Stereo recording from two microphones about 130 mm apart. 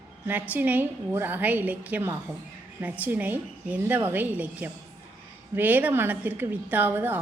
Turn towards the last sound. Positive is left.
turn(degrees=-15)  # may be behind; listen again after turning